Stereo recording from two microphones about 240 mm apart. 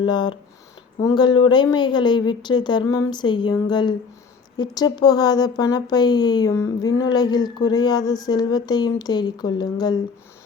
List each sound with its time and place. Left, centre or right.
0.0 s a woman's voice: centre